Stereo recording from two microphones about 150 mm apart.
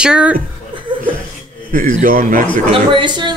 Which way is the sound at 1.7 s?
65° right (ahead or behind).